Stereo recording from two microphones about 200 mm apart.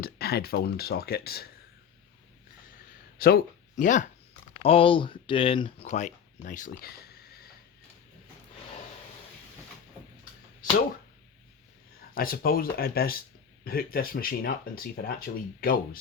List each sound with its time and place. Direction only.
0.0 s speech: 50° left (ahead or behind)
2.9 s a sound: 50° left (ahead or behind)
4.6 s speech: 30° left (ahead or behind)
5.9 s speech: 40° left (ahead or behind)
12.1 s speech: 45° left (ahead or behind)